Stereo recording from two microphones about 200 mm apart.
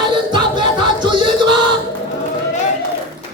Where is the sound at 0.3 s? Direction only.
20° right (ahead or behind).